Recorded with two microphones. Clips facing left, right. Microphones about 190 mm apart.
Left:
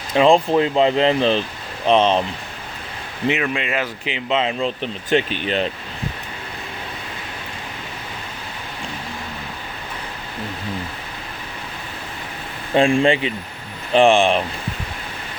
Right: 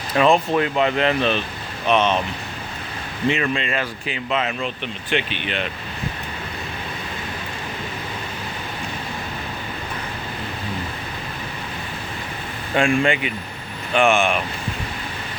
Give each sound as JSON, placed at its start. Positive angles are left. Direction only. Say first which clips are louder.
{"t": 0.1, "sound": "speech", "louder": "left 3 dB", "side_deg": 25}
{"t": 3.4, "sound": "speech", "louder": "left 1 dB", "side_deg": 10}
{"t": 12.7, "sound": "speech", "louder": "left 3 dB", "side_deg": 30}